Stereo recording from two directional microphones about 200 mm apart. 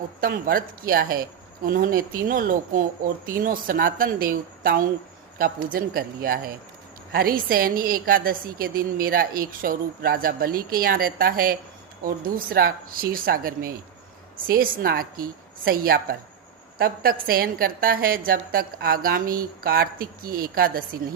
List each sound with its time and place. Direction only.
0.2 s a woman's voice: 45° right (ahead or behind)